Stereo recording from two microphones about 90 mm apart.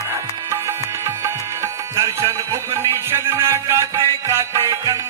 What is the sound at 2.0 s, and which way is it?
Music, 30° right (ahead or behind).